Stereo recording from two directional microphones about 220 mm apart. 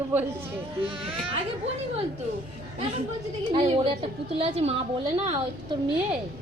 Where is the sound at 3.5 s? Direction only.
25° right (ahead or behind).